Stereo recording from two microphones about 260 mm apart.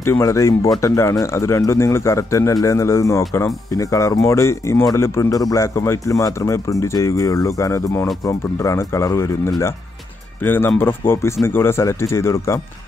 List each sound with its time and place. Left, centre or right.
0.0 s speech: centre